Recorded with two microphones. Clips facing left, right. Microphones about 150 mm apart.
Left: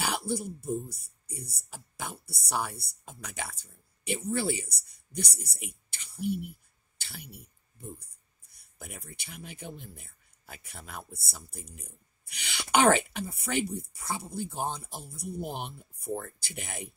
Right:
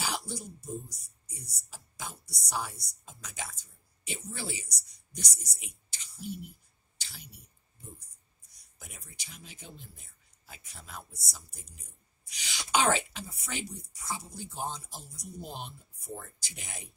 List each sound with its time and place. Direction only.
0.0 s speech: 60° left (ahead or behind)
7.0 s a sound: 60° left (ahead or behind)
8.5 s speech: 60° left (ahead or behind)